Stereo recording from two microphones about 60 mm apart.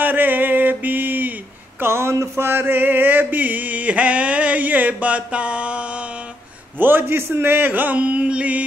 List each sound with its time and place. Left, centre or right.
0.0 s mantra: right
1.8 s a sound: right; by 6.0 s centre
6.8 s speech: right